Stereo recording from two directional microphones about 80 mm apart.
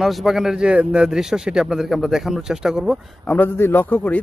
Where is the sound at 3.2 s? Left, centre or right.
Left.